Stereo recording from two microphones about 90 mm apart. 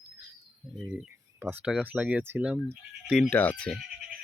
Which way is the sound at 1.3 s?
25° right (ahead or behind).